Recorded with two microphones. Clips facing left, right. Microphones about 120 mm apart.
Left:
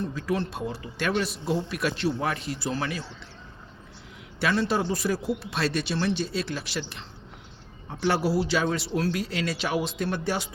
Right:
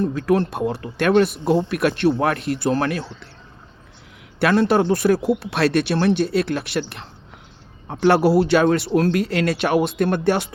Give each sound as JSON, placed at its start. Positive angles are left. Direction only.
{"t": 0.0, "sound": "speech", "side_deg": -60}
{"t": 4.4, "sound": "speech", "side_deg": -60}